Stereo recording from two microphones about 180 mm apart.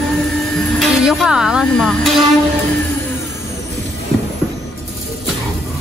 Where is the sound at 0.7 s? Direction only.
Centre (ahead or behind).